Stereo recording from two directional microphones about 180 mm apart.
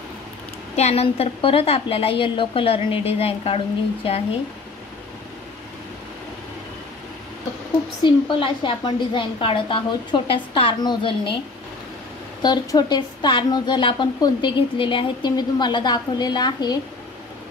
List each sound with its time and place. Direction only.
0.7 s a woman's voice: 35° left (ahead or behind)
8.0 s a woman's voice: 25° left (ahead or behind)
12.4 s a woman's voice: 25° left (ahead or behind)